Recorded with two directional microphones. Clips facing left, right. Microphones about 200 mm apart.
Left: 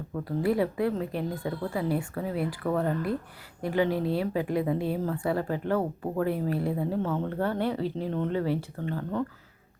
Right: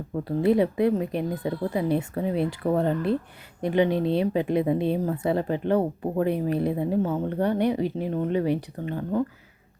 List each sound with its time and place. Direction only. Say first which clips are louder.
0.4 s a woman's voice: right 5 dB; 20° right (ahead or behind)